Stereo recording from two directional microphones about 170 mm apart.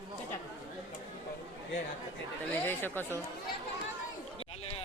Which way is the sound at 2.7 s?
10° left (ahead or behind).